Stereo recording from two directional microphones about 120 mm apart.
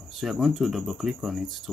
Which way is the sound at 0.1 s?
Centre (ahead or behind).